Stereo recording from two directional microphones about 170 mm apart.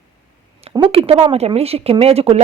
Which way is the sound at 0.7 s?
35° right (ahead or behind).